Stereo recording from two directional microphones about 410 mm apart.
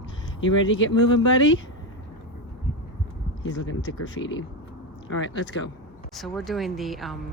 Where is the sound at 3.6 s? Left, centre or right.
Left.